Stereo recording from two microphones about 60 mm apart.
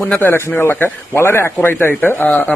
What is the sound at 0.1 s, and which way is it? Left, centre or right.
A man's voice, left.